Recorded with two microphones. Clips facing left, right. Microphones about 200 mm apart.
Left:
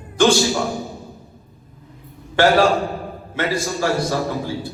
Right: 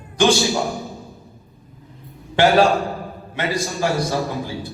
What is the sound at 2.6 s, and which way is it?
Speech, centre (ahead or behind).